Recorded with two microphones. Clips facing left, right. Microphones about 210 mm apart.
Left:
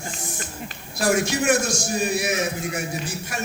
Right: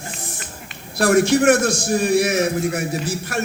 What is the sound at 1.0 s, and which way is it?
A man's voice, 55° right (ahead or behind).